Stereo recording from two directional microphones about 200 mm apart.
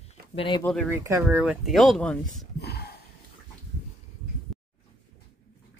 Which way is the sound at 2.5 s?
55° left (ahead or behind).